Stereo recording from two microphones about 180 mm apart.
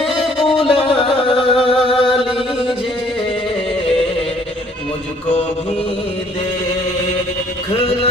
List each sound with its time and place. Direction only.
0.3 s music: 30° left (ahead or behind)
0.9 s singing: 30° left (ahead or behind)